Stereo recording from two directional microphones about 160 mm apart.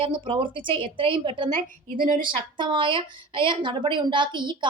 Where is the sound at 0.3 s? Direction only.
30° right (ahead or behind).